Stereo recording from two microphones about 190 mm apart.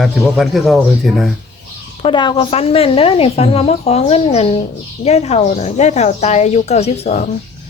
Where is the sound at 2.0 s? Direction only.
25° left (ahead or behind).